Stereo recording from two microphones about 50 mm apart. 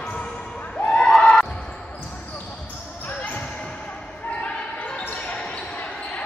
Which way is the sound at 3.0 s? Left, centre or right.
Left.